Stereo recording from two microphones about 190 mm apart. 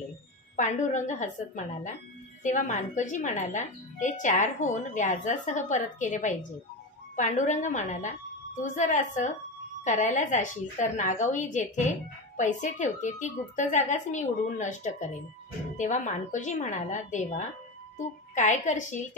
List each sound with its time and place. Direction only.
0.6 s a woman's voice: 40° left (ahead or behind)